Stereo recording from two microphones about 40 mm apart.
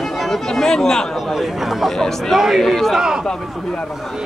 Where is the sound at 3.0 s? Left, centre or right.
Centre.